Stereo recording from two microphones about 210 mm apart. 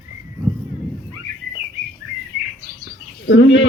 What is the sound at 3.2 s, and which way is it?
Speech, 60° left (ahead or behind).